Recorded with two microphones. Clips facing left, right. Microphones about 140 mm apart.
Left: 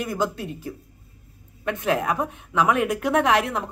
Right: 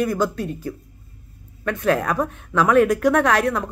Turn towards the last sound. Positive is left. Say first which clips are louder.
# right 2 dB
turn(degrees=20)  # may be behind; listen again after turning